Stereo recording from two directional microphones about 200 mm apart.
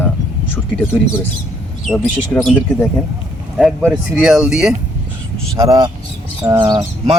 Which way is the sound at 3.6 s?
Centre (ahead or behind).